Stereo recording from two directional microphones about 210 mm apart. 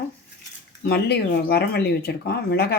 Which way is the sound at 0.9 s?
50° left (ahead or behind).